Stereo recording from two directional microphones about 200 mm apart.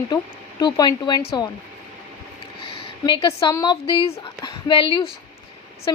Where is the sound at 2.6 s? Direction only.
25° left (ahead or behind).